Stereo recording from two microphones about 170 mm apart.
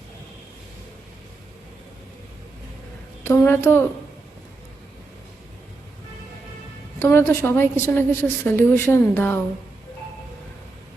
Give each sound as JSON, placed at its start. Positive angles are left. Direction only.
{"t": 3.2, "sound": "a woman's voice", "side_deg": 15}
{"t": 7.0, "sound": "a woman's voice", "side_deg": 15}